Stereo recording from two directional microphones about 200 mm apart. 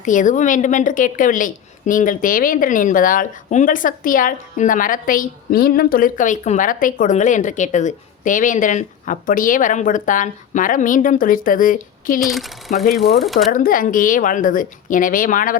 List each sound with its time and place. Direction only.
0.0 s a woman's voice: 40° left (ahead or behind)
12.2 s speech: centre (ahead or behind)
13.5 s a woman's voice: 45° left (ahead or behind)